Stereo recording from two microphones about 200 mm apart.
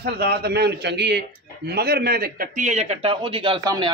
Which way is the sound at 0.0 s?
50° right (ahead or behind).